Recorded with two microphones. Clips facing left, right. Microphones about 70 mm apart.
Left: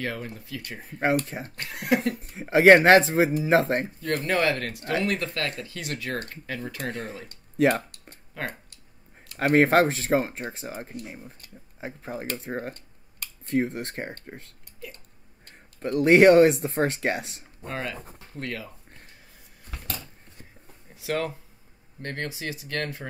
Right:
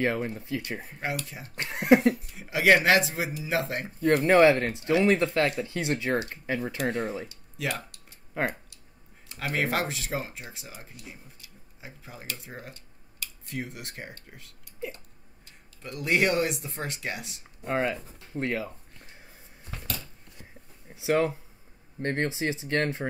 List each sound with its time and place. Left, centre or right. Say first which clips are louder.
0.0 s speech: right 5 dB; right
0.9 s speech: left 12 dB; left
1.5 s speech: right 5 dB; right
2.1 s speech: left 9 dB; left
3.8 s speech: right 5 dB; right
7.2 s a sound: left 11 dB; left
9.4 s speech: left 10 dB; left
14.8 s speech: right 6 dB; right
15.4 s speech: left 11 dB; left
17.6 s speech: right 5 dB; right
20.9 s speech: right 4 dB; centre